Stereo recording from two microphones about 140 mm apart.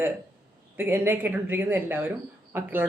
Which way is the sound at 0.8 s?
15° right (ahead or behind).